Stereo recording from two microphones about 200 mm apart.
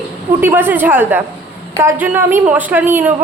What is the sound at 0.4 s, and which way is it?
A woman's voice, 10° right (ahead or behind).